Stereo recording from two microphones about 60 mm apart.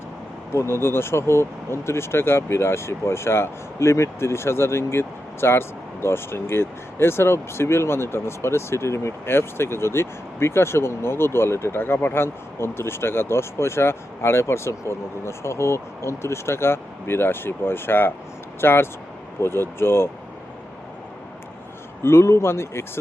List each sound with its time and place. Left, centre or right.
0.5 s speech: left
22.0 s speech: left